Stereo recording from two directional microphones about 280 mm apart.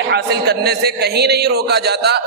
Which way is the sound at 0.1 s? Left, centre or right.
Right.